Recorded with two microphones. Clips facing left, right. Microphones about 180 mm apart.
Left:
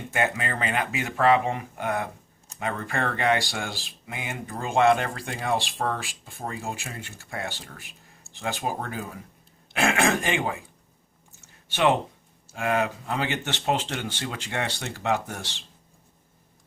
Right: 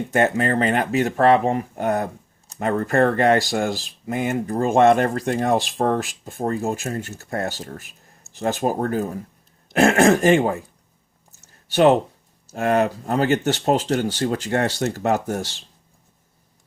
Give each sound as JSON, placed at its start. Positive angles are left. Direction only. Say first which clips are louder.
{"t": 0.1, "sound": "speech", "louder": "right 8 dB", "side_deg": -40}
{"t": 11.3, "sound": "a sound", "louder": "right 9 dB", "side_deg": -40}
{"t": 12.5, "sound": "speech", "louder": "right 6 dB", "side_deg": -40}